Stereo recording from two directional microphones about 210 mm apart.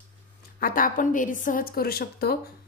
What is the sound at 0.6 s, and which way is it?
A woman's voice, 40° left (ahead or behind).